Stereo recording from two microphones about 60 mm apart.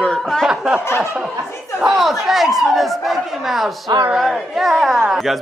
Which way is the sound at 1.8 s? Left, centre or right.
Centre.